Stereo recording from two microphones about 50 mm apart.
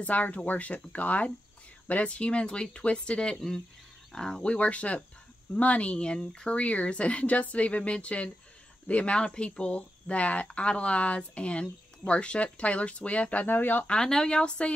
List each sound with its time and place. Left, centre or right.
0.0 s speech: left
13.5 s speech: left
13.8 s speech: centre